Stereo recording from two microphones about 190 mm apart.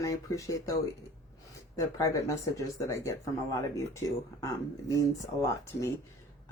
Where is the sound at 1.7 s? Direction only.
15° left (ahead or behind).